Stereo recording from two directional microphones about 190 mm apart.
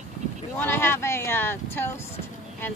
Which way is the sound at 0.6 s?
10° left (ahead or behind).